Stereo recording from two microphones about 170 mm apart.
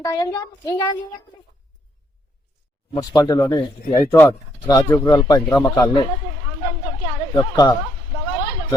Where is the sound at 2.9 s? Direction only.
20° left (ahead or behind).